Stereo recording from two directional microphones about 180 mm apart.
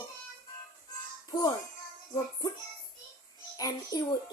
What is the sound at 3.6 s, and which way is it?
Speech, 20° left (ahead or behind).